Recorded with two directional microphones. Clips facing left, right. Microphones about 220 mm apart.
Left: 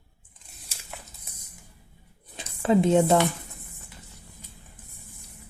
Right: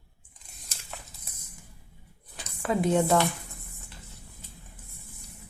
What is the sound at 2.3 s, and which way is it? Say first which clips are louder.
Speech: left 7 dB; 25° left (ahead or behind).